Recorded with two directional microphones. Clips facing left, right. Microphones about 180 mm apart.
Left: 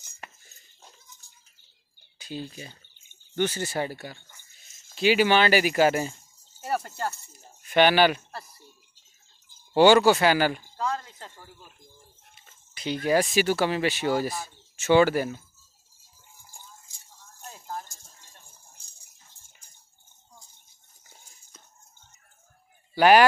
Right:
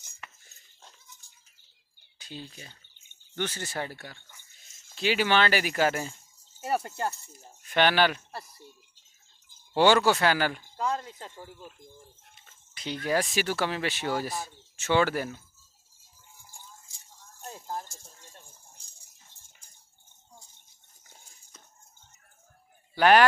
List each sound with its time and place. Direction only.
3.3 s speech: 5° left (ahead or behind)
6.6 s speech: 20° right (ahead or behind)
7.7 s speech: 5° left (ahead or behind)
9.8 s speech: 5° left (ahead or behind)
10.8 s speech: 15° right (ahead or behind)
12.4 s speech: 5° left (ahead or behind)
17.5 s a sound: 30° right (ahead or behind)
22.9 s speech: 5° left (ahead or behind)